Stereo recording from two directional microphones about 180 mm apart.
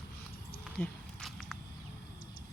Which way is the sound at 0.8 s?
Centre (ahead or behind).